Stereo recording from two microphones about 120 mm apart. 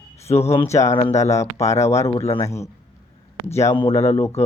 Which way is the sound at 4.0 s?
60° left (ahead or behind).